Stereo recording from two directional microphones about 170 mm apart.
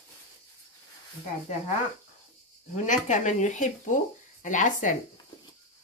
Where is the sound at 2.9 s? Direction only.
45° left (ahead or behind).